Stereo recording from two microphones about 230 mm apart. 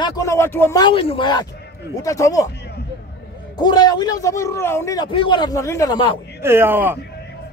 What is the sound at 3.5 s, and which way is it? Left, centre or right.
Speech, centre.